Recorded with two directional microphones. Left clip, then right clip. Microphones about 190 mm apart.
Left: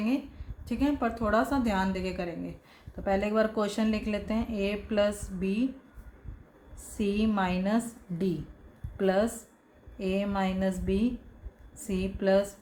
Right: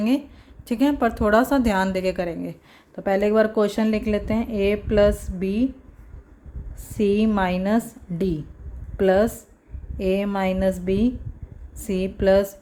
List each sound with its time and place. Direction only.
0.7 s a woman's voice: 50° right (ahead or behind)
6.9 s a woman's voice: 40° right (ahead or behind)
9.0 s a woman's voice: 40° right (ahead or behind)